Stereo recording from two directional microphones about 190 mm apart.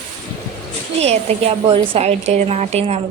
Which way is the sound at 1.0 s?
35° right (ahead or behind).